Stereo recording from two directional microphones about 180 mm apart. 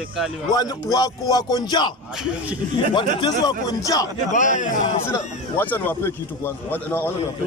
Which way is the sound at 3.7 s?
20° left (ahead or behind).